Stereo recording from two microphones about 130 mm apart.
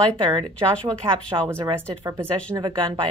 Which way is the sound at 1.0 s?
45° right (ahead or behind).